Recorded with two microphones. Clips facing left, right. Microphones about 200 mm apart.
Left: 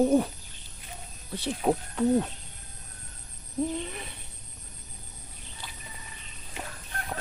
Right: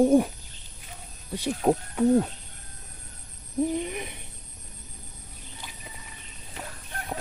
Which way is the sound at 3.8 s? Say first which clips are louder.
Right 5 dB; 15° right (ahead or behind).